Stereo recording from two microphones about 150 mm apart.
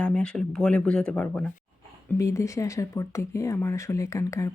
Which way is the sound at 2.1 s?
20° left (ahead or behind).